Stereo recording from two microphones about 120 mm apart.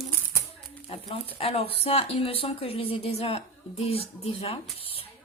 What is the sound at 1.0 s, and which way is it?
Speech, 50° left (ahead or behind).